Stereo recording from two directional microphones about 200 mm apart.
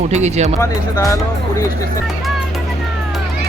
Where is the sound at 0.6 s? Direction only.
15° left (ahead or behind).